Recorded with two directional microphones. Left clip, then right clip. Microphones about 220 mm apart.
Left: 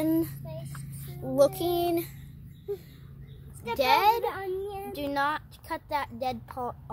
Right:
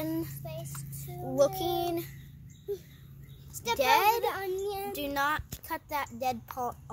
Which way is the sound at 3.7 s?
10° left (ahead or behind).